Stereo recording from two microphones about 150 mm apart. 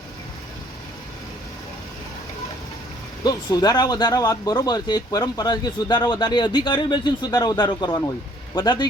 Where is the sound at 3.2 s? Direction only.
25° left (ahead or behind).